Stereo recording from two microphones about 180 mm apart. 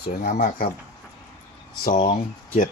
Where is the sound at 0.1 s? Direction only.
55° left (ahead or behind).